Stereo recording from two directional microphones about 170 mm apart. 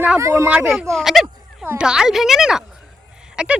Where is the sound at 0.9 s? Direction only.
Centre (ahead or behind).